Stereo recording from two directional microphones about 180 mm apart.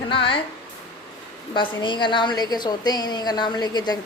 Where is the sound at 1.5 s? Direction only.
25° left (ahead or behind).